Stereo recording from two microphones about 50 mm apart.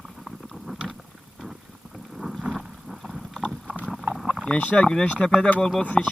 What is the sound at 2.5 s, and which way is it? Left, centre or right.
Vehicle, centre.